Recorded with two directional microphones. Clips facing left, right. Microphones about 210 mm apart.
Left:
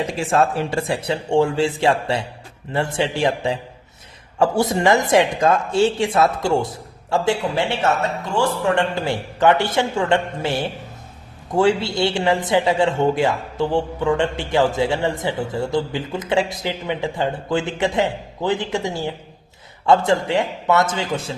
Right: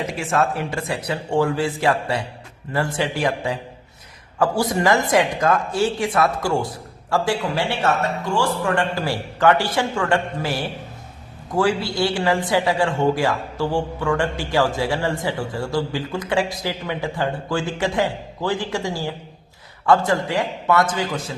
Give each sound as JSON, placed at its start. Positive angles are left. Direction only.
{"t": 0.2, "sound": "a man's voice", "side_deg": 30}